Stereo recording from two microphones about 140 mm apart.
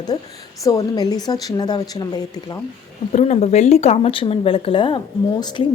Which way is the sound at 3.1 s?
50° left (ahead or behind).